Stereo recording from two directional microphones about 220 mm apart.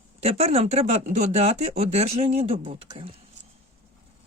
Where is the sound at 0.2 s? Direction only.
30° right (ahead or behind).